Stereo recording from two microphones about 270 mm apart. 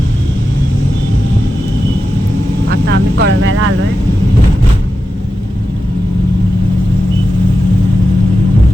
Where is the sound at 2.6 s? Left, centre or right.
Right.